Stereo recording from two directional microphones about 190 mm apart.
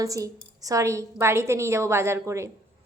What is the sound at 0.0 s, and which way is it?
A woman's voice, 15° right (ahead or behind).